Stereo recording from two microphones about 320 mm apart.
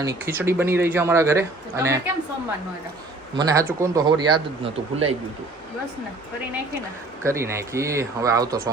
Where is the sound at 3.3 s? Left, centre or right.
Centre.